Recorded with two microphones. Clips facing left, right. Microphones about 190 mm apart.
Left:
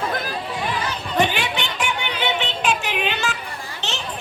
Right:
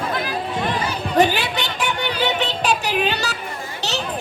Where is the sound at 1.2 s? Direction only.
40° right (ahead or behind).